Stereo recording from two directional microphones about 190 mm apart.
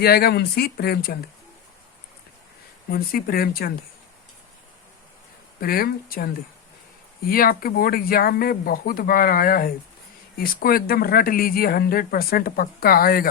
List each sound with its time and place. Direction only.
0.0 s speech: 55° left (ahead or behind)
2.9 s speech: 50° left (ahead or behind)
5.5 s speech: 50° left (ahead or behind)